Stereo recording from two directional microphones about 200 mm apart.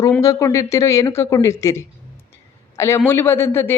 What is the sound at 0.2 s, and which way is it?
A man's voice, 15° left (ahead or behind).